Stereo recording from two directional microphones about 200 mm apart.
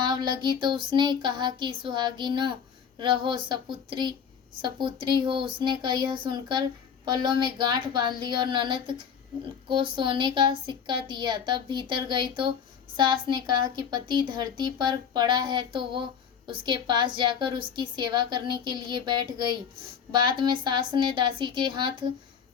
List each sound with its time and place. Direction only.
0.0 s speech: 20° right (ahead or behind)